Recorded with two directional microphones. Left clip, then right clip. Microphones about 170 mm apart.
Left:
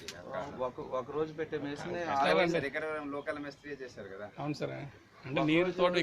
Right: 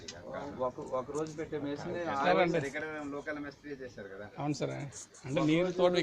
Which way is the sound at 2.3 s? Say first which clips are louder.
Right 2 dB; 40° right (ahead or behind).